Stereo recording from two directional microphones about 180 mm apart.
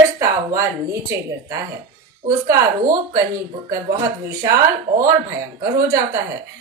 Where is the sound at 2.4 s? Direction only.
20° right (ahead or behind).